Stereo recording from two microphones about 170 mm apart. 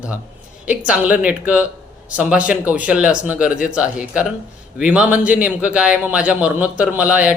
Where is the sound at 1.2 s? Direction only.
5° right (ahead or behind).